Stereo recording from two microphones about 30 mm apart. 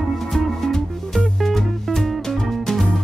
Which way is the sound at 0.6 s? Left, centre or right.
Centre.